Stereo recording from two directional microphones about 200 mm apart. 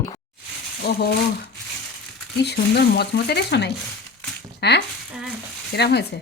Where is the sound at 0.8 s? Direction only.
50° left (ahead or behind).